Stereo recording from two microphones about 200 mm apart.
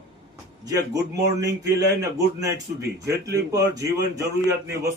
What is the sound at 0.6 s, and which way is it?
Speech, 20° right (ahead or behind).